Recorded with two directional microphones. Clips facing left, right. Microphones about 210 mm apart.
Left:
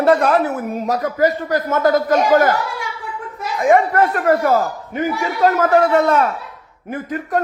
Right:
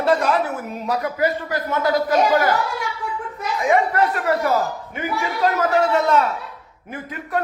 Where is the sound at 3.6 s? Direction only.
50° left (ahead or behind).